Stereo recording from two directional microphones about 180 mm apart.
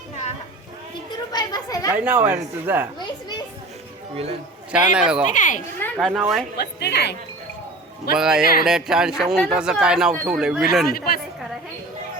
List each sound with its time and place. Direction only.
1.3 s children playing: 20° left (ahead or behind)
2.0 s speech: 10° right (ahead or behind)
4.7 s speech: 5° right (ahead or behind)
5.3 s a child's voice: 45° left (ahead or behind)
5.8 s speech: centre (ahead or behind)
6.6 s a woman's voice: 65° left (ahead or behind)
8.1 s speech: 5° right (ahead or behind)
10.8 s a woman's voice: 55° left (ahead or behind)